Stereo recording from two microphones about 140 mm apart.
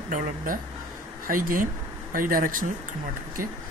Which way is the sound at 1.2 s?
90° right.